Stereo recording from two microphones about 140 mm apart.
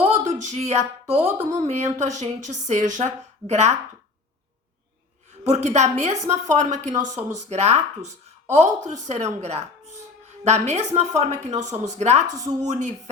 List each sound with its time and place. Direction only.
0.0 s a sound: 55° right (ahead or behind)
1.5 s speech: 55° right (ahead or behind)
5.4 s a woman's voice: 55° right (ahead or behind)